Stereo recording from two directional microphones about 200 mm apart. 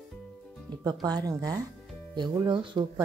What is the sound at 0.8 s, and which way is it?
Speech, 20° right (ahead or behind).